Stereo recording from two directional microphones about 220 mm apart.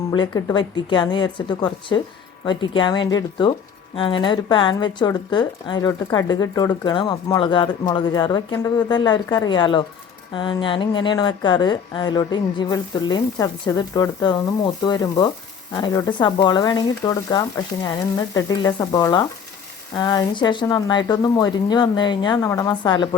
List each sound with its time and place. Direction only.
0.1 s a woman's voice: 15° left (ahead or behind)